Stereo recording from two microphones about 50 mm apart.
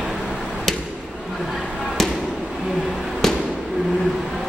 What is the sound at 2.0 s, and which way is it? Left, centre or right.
Basketball bounce, centre.